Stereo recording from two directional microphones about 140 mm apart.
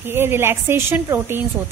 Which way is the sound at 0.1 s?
15° right (ahead or behind).